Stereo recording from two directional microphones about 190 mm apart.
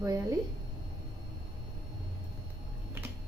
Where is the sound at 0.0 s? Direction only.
15° right (ahead or behind).